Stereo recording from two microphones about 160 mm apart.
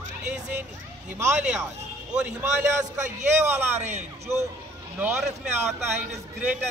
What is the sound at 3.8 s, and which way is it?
Speech, 45° right (ahead or behind).